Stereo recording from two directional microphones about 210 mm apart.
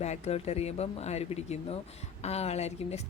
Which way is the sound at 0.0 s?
30° left (ahead or behind).